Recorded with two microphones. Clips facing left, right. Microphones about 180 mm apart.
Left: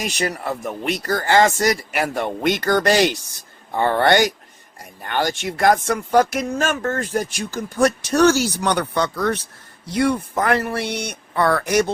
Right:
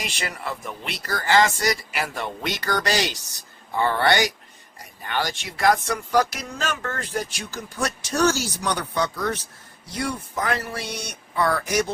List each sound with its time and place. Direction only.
0.0 s speech: 45° left (ahead or behind); by 11.9 s 60° left (ahead or behind)